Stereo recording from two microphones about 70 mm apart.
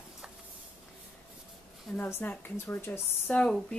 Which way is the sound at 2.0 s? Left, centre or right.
Left.